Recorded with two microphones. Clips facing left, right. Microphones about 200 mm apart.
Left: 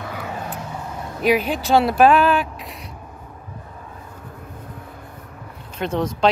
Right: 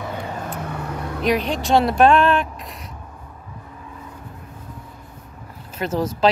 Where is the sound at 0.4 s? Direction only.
65° right (ahead or behind).